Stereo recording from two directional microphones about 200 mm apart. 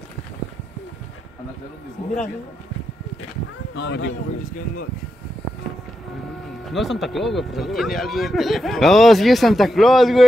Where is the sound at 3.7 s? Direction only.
65° left (ahead or behind).